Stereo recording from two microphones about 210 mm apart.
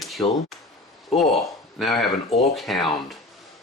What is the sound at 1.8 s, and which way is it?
Speech, centre (ahead or behind).